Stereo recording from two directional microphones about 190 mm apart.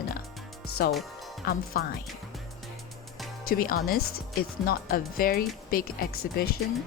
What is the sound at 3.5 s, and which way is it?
Speech, 50° left (ahead or behind).